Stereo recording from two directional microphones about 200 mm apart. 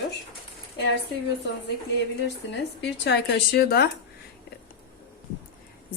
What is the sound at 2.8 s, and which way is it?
A woman's voice, 60° left (ahead or behind).